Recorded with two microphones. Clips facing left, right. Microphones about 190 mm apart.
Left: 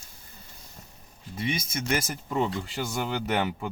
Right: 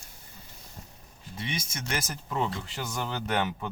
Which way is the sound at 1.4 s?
5° left (ahead or behind).